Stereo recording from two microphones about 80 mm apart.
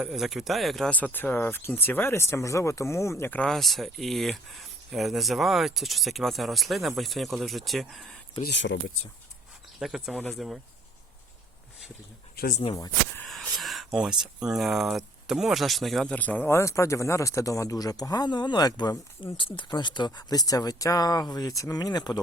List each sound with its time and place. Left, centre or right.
0.0 s speech: centre
0.9 s speech: centre; by 3.2 s left
3.2 s speech: centre
3.5 s speech: centre
8.4 s speech: left
9.7 s speech: centre
13.2 s speech: centre
16.1 s speech: centre
16.5 s speech: left